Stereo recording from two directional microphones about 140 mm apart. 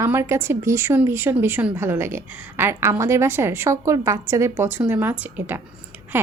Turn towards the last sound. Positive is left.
turn(degrees=-10)  # may be behind; listen again after turning